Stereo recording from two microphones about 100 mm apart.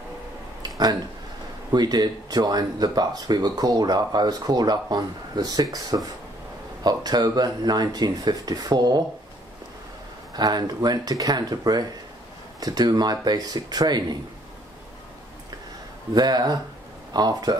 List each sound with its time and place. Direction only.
0.6 s a sound: 40° right (ahead or behind)
1.7 s speech: 45° right (ahead or behind)
10.3 s speech: 45° right (ahead or behind)
16.2 s speech: 45° right (ahead or behind)